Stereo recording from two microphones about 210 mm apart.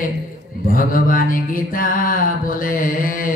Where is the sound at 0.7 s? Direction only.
40° left (ahead or behind).